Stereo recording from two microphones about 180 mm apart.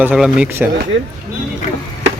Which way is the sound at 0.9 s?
90° right.